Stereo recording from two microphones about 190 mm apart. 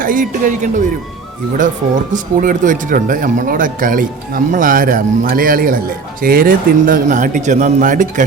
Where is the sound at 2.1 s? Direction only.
45° right (ahead or behind).